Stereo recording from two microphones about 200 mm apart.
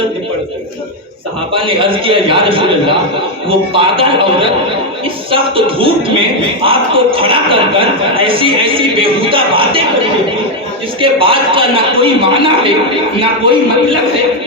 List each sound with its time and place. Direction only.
1.5 s a man's voice: 25° right (ahead or behind)
11.0 s a man's voice: 25° right (ahead or behind)